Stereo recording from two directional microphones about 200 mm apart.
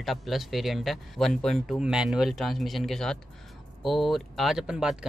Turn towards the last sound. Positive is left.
turn(degrees=-5)  # may be behind; listen again after turning